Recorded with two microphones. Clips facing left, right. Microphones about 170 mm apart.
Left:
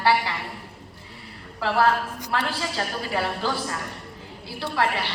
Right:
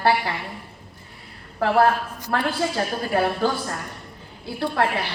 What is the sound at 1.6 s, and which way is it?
A woman's voice, 55° right (ahead or behind).